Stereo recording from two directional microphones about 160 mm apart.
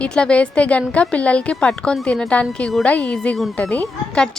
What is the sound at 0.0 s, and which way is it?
A woman's voice, 5° left (ahead or behind).